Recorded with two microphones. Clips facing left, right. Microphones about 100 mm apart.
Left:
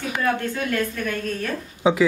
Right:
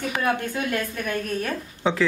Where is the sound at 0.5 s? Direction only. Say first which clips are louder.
Left 2 dB; 15° right (ahead or behind).